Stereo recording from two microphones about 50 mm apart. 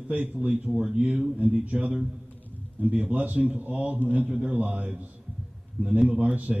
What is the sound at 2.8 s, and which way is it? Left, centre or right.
A man's voice, right.